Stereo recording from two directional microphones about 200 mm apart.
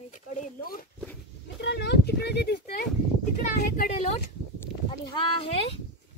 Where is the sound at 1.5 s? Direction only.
60° left (ahead or behind).